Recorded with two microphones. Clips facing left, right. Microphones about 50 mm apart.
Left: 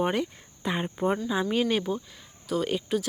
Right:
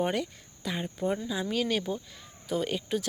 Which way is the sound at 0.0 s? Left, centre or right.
Centre.